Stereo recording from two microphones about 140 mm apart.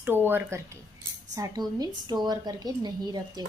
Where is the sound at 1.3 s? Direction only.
25° right (ahead or behind).